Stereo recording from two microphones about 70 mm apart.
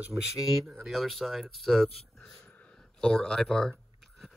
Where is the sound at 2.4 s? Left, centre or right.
Centre.